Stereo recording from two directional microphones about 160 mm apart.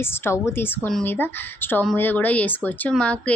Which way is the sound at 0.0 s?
15° left (ahead or behind).